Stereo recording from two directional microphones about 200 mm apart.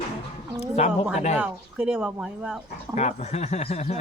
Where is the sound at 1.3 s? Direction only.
5° right (ahead or behind).